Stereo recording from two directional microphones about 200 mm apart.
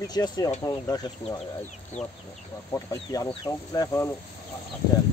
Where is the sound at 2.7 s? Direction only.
15° left (ahead or behind).